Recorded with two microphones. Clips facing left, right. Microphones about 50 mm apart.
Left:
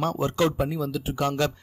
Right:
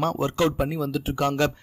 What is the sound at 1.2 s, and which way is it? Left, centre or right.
Speech, right.